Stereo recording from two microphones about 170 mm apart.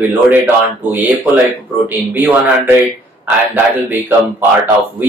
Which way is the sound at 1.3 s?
10° right (ahead or behind).